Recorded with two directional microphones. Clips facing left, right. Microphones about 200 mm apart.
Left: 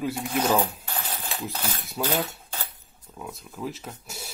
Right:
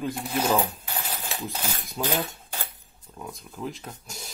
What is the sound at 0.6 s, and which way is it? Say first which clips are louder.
Coin: even; 15° right (ahead or behind).